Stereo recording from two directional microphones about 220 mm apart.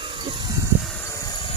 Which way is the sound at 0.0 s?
20° right (ahead or behind).